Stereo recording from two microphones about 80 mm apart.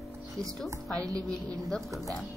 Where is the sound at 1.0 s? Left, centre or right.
Right.